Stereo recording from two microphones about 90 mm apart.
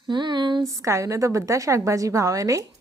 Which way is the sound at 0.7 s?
35° right (ahead or behind).